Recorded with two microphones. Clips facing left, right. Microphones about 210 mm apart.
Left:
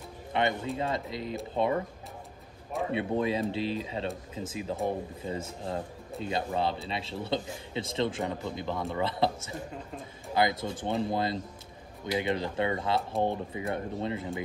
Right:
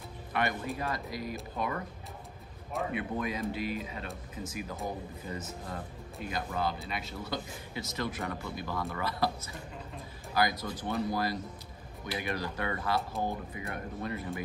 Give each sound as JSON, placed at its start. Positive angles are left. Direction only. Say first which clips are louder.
{"t": 0.3, "sound": "speech", "louder": "left 4 dB", "side_deg": 25}
{"t": 2.9, "sound": "speech", "louder": "left 8 dB", "side_deg": 30}